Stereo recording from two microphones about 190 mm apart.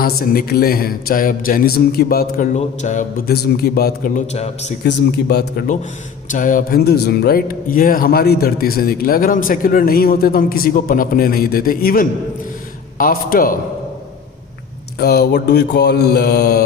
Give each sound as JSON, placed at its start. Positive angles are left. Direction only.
{"t": 0.0, "sound": "speech", "side_deg": 50}
{"t": 4.8, "sound": "mantra", "side_deg": 60}
{"t": 6.2, "sound": "speech", "side_deg": 45}
{"t": 14.9, "sound": "mantra", "side_deg": 60}